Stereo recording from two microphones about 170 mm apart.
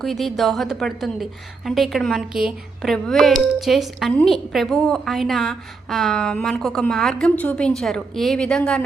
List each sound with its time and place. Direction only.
0.0 s a woman's voice: centre (ahead or behind)